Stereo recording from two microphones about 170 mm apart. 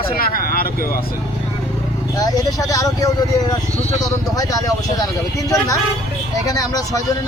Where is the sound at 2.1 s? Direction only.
20° left (ahead or behind).